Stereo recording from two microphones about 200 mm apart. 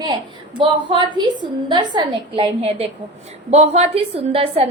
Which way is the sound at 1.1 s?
20° right (ahead or behind).